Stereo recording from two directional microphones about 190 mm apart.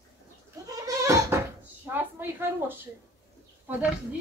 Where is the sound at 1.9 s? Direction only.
10° right (ahead or behind).